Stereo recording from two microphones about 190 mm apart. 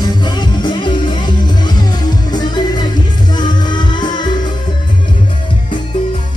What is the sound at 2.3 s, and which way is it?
Music, 25° left (ahead or behind).